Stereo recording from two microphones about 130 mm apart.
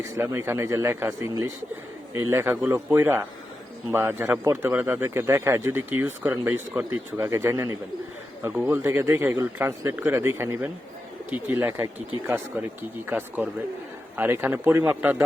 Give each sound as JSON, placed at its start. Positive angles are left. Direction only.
{"t": 0.0, "sound": "speech", "side_deg": -20}
{"t": 12.5, "sound": "speech", "side_deg": -15}